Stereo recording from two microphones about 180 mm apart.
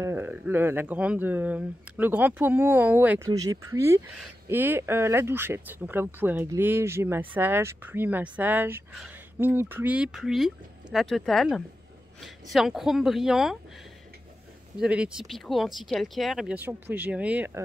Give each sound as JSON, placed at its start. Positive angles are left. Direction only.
{"t": 0.0, "sound": "speech", "side_deg": -10}
{"t": 14.8, "sound": "speech", "side_deg": -5}